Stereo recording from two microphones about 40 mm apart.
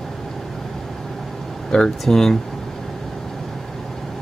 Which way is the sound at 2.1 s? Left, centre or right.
Centre.